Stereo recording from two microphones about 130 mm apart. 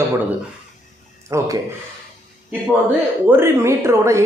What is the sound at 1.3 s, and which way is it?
Speech, 25° right (ahead or behind).